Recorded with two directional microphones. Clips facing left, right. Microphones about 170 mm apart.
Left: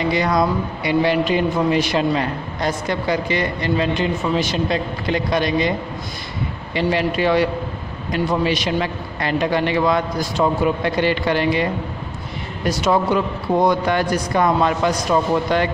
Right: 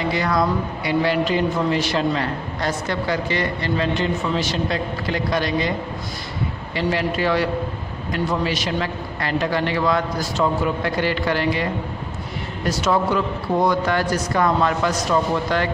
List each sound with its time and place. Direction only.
0.0 s speech: 20° left (ahead or behind)
6.7 s a man's voice: 20° left (ahead or behind)